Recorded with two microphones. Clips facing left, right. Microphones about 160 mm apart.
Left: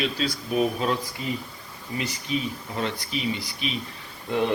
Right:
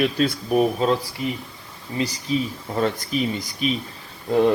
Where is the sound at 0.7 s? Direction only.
30° right (ahead or behind).